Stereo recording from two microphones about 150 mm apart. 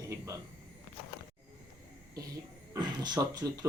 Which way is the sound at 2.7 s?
30° right (ahead or behind).